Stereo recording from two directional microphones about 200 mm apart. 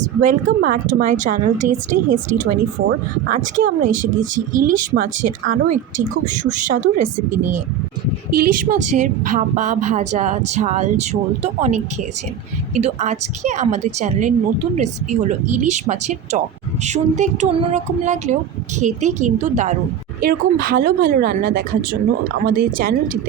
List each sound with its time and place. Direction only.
0.0 s a woman's voice: 40° right (ahead or behind)
8.3 s a woman's voice: 45° right (ahead or behind)
20.2 s speech: 50° right (ahead or behind)